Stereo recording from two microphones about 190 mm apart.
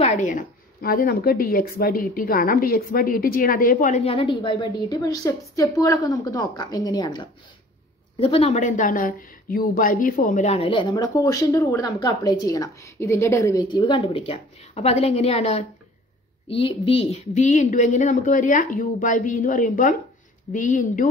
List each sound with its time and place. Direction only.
0.0 s speech: 40° left (ahead or behind)
4.1 s a woman's voice: 30° left (ahead or behind)
8.2 s a woman's voice: 30° left (ahead or behind)